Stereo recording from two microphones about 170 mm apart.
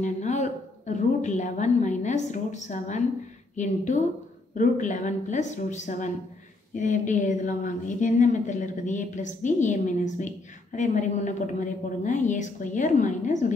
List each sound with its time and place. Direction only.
0.0 s a woman's voice: 45° left (ahead or behind)